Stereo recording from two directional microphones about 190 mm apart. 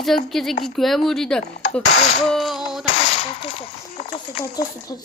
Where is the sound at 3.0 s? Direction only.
30° left (ahead or behind).